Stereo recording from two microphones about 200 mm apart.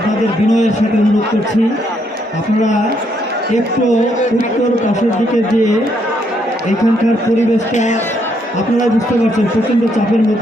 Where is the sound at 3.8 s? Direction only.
35° left (ahead or behind).